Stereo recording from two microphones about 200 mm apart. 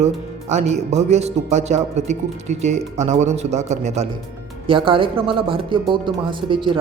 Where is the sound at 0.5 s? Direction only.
35° right (ahead or behind).